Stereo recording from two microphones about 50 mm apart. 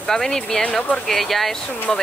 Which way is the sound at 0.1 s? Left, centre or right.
Centre.